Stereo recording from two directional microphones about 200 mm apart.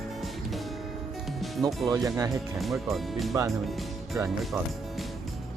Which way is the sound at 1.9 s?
15° right (ahead or behind).